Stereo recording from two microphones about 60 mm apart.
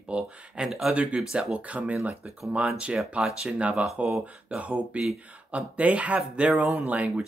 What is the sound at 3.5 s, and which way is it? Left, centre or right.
Speech, right.